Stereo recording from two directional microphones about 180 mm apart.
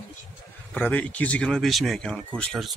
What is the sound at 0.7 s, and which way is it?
Speech, 10° left (ahead or behind).